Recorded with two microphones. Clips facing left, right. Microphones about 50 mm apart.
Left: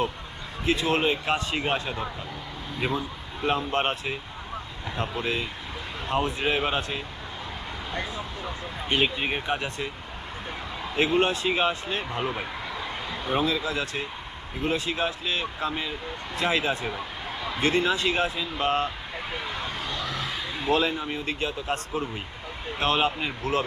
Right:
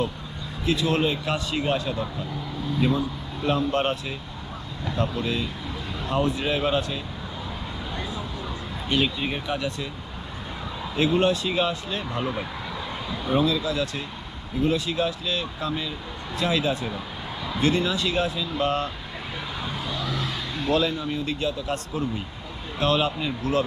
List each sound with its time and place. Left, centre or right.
0.6 s speech: left
8.9 s speech: left
10.9 s speech: left
20.0 s speech: centre; by 23.6 s left